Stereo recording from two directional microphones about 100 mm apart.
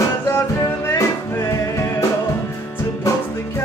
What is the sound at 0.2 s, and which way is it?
Music, 25° left (ahead or behind).